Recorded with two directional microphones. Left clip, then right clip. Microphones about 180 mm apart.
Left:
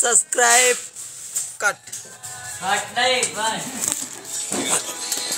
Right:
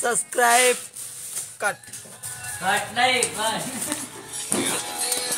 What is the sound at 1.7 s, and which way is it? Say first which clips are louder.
Speech: left 4 dB; 10° right (ahead or behind).